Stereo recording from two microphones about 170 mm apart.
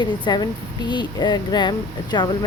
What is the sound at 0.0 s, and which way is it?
Speech, 25° left (ahead or behind).